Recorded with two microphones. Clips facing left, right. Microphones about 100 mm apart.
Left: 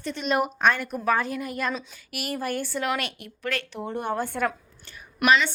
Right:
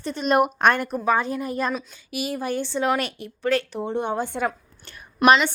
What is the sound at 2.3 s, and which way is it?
Speech, 20° right (ahead or behind).